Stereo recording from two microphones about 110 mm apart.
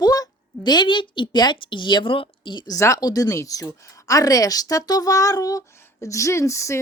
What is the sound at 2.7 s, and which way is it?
Speech, 30° left (ahead or behind).